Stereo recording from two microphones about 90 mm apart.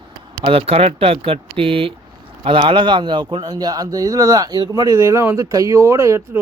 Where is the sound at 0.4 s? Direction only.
90° right.